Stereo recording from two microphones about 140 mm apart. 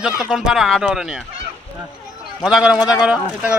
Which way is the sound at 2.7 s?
30° left (ahead or behind).